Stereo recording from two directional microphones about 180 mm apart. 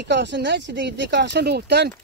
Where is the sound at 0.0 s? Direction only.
75° right (ahead or behind).